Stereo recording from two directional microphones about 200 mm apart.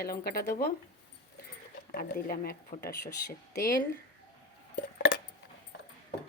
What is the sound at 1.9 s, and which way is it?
Speech, 45° left (ahead or behind).